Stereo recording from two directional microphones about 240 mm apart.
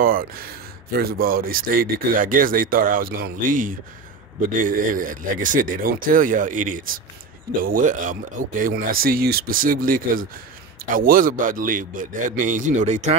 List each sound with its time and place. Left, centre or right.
0.0 s speech: right